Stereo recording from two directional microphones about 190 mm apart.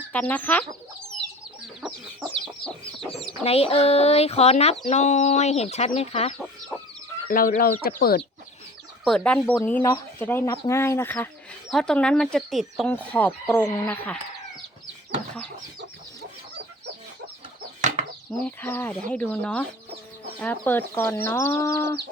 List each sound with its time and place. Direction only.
0.1 s speech: 10° left (ahead or behind)
1.8 s chicken: centre (ahead or behind)
3.4 s chicken: 30° left (ahead or behind)
7.3 s speech: 50° left (ahead or behind)
9.0 s speech: 5° left (ahead or behind)
17.7 s chicken: 40° right (ahead or behind)
18.3 s speech: 10° left (ahead or behind)